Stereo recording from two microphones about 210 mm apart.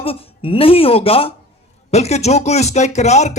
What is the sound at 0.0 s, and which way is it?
Speech, 25° left (ahead or behind).